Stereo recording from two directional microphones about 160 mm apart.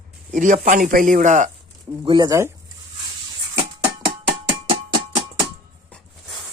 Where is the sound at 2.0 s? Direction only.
25° right (ahead or behind).